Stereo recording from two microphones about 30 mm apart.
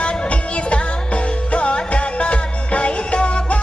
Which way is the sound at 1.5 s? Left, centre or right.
Left.